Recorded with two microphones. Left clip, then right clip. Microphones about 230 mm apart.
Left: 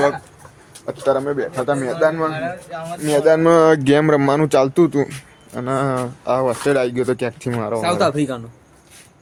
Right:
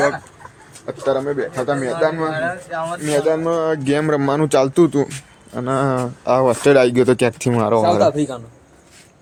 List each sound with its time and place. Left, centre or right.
0.9 s speech: centre
2.3 s speech: right
3.2 s speech: left
3.8 s speech: centre; by 7.8 s right
7.8 s speech: left